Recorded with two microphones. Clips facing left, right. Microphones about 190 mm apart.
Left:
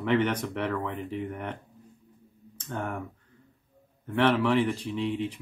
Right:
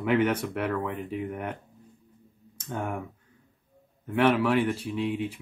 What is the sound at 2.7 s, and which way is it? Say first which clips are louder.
Speech: right 1 dB; centre (ahead or behind).